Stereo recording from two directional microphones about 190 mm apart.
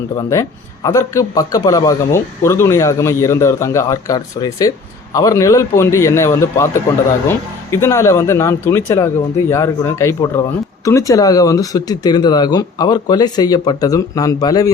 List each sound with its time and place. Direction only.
0.2 s a man's voice: 15° left (ahead or behind)